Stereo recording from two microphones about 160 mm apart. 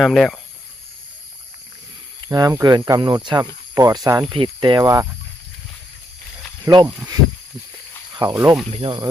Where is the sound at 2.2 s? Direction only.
20° right (ahead or behind).